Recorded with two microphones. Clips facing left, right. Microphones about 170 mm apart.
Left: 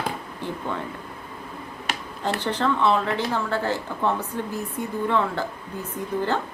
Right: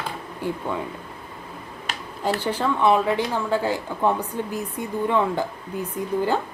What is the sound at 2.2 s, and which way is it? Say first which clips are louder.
Speech: right 1 dB; 10° right (ahead or behind).